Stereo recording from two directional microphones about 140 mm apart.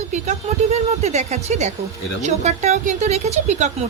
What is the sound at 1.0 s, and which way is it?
Speech, 50° right (ahead or behind).